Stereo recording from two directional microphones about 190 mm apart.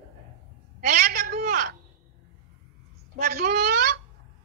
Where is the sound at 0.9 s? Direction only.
50° right (ahead or behind).